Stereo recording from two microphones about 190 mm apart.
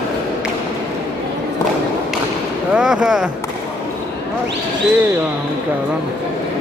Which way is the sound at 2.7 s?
5° right (ahead or behind).